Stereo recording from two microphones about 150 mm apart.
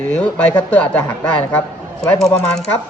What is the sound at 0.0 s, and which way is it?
A man's voice, 10° left (ahead or behind).